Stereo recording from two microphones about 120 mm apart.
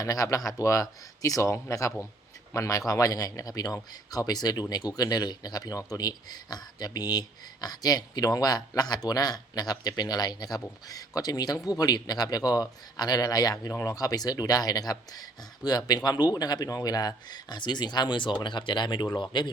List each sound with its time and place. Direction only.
0.0 s speech: 30° left (ahead or behind)